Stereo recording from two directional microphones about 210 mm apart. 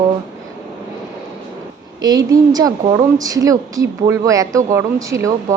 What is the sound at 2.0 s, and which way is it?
A woman's voice, 15° right (ahead or behind).